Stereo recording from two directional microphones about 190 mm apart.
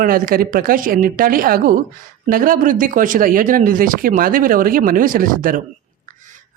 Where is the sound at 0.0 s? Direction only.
50° right (ahead or behind).